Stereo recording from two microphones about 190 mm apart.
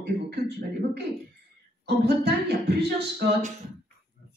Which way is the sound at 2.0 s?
60° right (ahead or behind).